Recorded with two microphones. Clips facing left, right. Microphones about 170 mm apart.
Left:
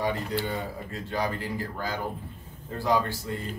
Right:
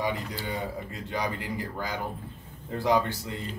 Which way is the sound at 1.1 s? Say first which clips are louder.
Left 1 dB; 15° right (ahead or behind).